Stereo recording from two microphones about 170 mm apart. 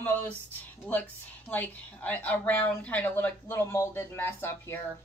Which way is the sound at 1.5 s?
10° left (ahead or behind).